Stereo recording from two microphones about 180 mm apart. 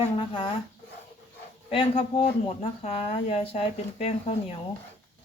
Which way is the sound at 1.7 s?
30° left (ahead or behind).